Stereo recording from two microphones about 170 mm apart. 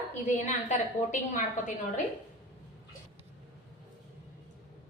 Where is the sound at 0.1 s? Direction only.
45° left (ahead or behind).